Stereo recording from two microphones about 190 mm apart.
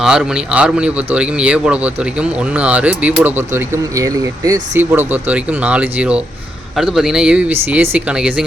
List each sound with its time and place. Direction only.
0.0 s speech: 5° right (ahead or behind)